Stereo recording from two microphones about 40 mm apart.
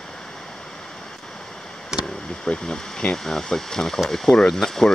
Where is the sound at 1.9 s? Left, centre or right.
Centre.